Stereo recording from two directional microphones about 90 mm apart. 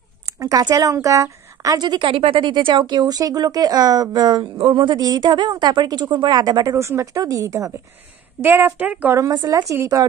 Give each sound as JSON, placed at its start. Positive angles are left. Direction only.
{"t": 0.4, "sound": "speech", "side_deg": -45}
{"t": 4.6, "sound": "speech", "side_deg": -70}
{"t": 4.9, "sound": "speech", "side_deg": -45}
{"t": 6.8, "sound": "speech", "side_deg": -35}
{"t": 8.4, "sound": "a woman's voice", "side_deg": -25}
{"t": 9.3, "sound": "speech", "side_deg": -45}